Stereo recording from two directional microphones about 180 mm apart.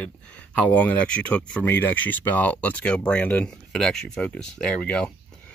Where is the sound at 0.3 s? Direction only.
10° left (ahead or behind).